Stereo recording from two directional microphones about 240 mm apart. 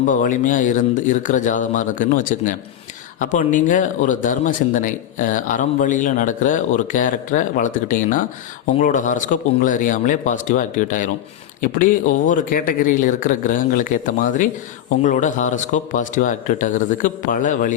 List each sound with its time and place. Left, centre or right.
0.1 s speech: left